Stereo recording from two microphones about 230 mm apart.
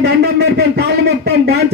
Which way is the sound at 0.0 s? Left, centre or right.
Right.